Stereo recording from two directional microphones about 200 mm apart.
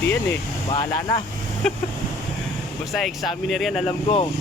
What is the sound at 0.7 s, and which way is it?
Speech, 20° left (ahead or behind).